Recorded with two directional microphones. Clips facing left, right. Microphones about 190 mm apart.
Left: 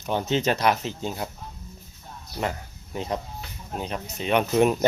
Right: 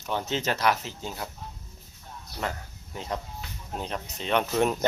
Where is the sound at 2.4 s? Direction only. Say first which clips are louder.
Left 4 dB; 20° left (ahead or behind).